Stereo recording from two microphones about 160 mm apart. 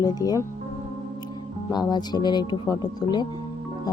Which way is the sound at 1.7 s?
25° left (ahead or behind).